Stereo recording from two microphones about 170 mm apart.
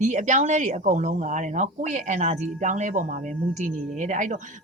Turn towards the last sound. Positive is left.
turn(degrees=-45)  # may be behind; listen again after turning